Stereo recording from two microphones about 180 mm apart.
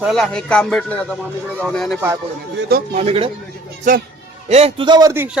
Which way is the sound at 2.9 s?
35° right (ahead or behind).